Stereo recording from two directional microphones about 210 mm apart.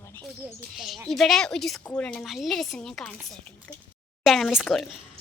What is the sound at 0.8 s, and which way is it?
A woman's voice, centre (ahead or behind).